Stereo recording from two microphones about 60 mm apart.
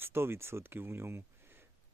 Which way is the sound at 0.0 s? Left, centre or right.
Right.